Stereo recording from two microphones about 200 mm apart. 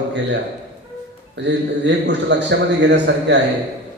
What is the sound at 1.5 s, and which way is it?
A man's voice, 60° right (ahead or behind).